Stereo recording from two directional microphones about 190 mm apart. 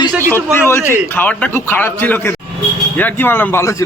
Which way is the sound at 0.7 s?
10° left (ahead or behind).